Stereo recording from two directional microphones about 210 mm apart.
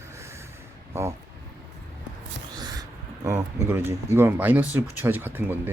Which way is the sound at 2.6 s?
20° right (ahead or behind).